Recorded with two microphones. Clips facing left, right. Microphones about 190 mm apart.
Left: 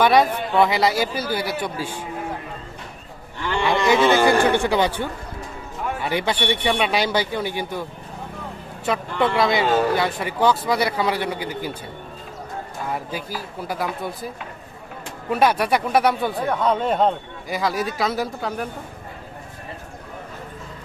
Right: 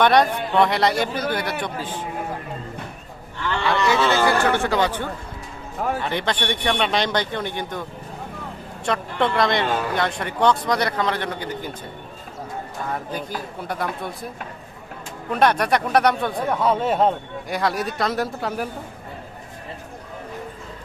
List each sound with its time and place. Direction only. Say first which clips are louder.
0.0 s speech: even; 5° left (ahead or behind)
3.3 s speech: left 1 dB; 15° left (ahead or behind)
12.9 s speech: even; 5° left (ahead or behind)
15.3 s speech: even; 5° left (ahead or behind)